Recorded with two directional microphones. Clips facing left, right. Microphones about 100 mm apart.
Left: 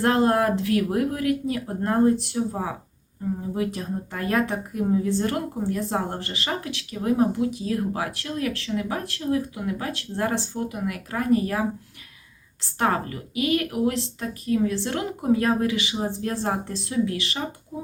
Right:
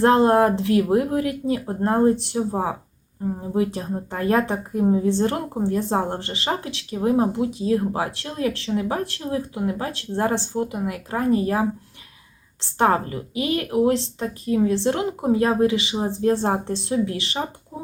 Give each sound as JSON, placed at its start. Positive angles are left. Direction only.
{"t": 0.0, "sound": "a woman's voice", "side_deg": -30}